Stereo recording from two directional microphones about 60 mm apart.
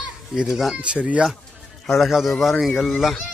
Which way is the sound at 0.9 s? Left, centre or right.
Right.